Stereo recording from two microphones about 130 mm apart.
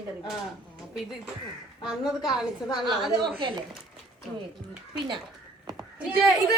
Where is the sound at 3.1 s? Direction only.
40° right (ahead or behind).